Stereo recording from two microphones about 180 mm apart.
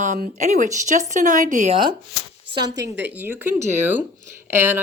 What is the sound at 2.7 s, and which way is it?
Speech, 70° right (ahead or behind).